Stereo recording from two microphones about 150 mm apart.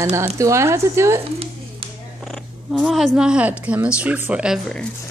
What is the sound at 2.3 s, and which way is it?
A woman's voice, centre (ahead or behind).